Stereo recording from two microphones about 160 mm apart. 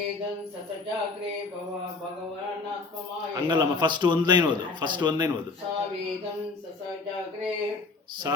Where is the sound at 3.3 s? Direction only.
30° right (ahead or behind).